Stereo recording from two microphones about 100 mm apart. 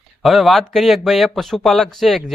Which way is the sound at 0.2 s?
Centre (ahead or behind).